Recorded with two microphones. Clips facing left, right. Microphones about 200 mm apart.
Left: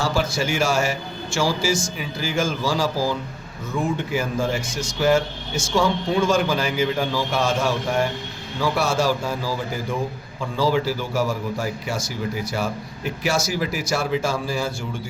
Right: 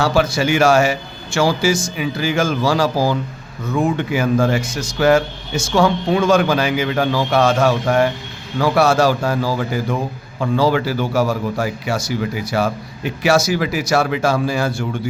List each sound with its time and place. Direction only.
0.0 s a man's voice: 65° right (ahead or behind)